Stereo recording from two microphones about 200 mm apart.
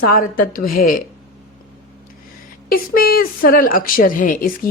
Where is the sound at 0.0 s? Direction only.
45° left (ahead or behind).